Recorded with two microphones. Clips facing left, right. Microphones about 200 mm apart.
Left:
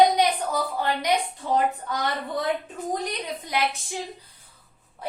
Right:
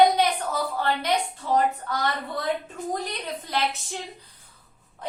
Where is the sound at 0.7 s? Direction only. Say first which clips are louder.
Even; 15° left (ahead or behind).